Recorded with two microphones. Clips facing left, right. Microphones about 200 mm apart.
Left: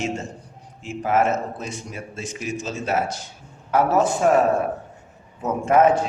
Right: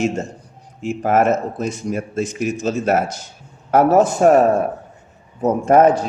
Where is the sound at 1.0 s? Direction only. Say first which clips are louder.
Right 4 dB; 45° right (ahead or behind).